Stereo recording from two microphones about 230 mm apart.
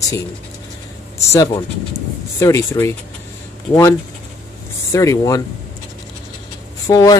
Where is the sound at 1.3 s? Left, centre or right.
Centre.